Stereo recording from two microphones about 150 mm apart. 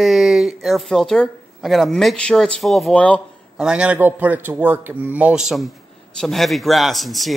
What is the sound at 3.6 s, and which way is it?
A man's voice, 5° right (ahead or behind).